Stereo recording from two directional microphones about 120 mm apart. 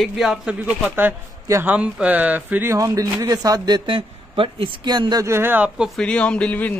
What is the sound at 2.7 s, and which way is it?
Speech, 30° right (ahead or behind).